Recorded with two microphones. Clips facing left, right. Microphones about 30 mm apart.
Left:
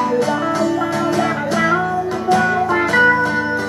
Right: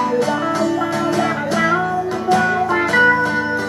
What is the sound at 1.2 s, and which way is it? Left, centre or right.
Music, centre.